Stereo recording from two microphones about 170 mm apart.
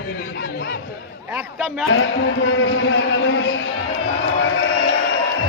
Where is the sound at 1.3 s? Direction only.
Centre (ahead or behind).